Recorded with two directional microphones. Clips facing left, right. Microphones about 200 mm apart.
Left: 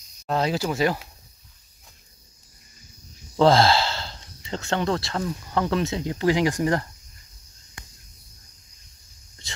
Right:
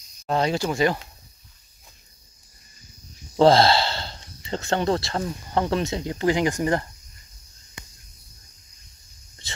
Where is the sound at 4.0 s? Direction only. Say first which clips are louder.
Right 1 dB; centre (ahead or behind).